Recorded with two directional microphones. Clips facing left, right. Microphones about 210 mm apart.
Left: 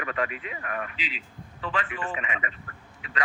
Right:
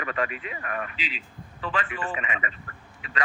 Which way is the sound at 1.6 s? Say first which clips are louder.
Right 1 dB; 40° right (ahead or behind).